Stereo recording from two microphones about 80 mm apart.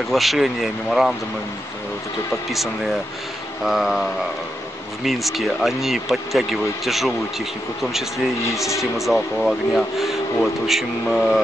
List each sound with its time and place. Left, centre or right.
0.1 s speech: centre
2.5 s speech: centre
8.9 s speech: centre